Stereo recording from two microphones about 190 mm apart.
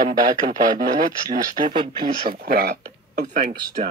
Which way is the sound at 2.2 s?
50° right (ahead or behind).